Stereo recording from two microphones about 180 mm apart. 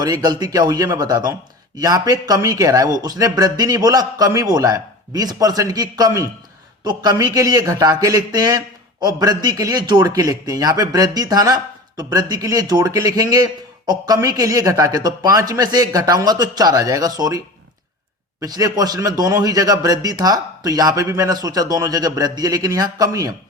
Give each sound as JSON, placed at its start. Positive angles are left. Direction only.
{"t": 0.0, "sound": "speech", "side_deg": -20}